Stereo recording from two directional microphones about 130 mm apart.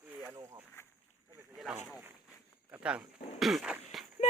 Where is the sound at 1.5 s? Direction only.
5° right (ahead or behind).